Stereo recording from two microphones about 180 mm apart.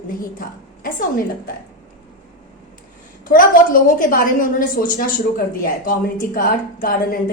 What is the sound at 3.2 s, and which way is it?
A woman's voice, 50° left (ahead or behind).